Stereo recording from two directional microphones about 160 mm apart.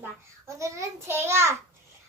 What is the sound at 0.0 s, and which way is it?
A child's voice, 20° right (ahead or behind).